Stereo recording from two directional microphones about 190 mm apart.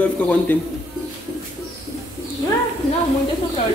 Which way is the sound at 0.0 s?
10° left (ahead or behind).